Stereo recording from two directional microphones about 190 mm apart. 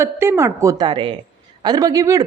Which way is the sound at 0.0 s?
15° right (ahead or behind).